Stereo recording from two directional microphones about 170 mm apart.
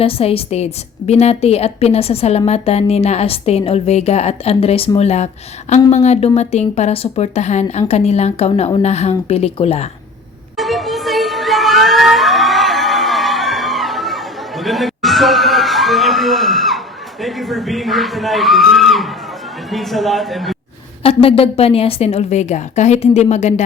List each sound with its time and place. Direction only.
0.0 s a woman's voice: 35° left (ahead or behind)
10.6 s music: centre (ahead or behind)
19.7 s a man's voice: centre (ahead or behind)
21.0 s a woman's voice: 35° left (ahead or behind)